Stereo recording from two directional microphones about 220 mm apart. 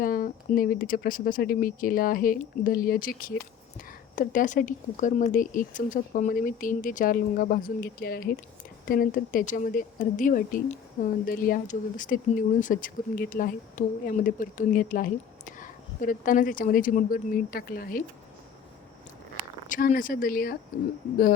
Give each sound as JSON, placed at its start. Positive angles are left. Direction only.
{"t": 0.0, "sound": "speech", "side_deg": 40}
{"t": 19.6, "sound": "speech", "side_deg": 35}